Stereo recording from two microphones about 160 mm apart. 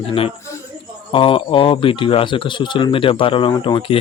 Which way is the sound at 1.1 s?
30° left (ahead or behind).